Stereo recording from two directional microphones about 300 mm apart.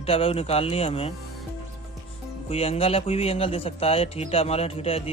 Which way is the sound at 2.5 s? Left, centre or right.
Centre.